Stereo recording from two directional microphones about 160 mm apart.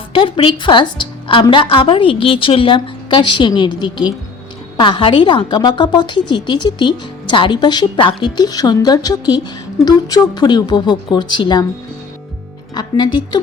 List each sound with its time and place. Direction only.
0.1 s a woman's voice: 35° left (ahead or behind)
12.7 s a woman's voice: 25° left (ahead or behind)